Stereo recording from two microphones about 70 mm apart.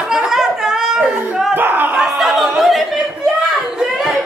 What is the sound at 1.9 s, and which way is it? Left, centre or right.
Speech, centre.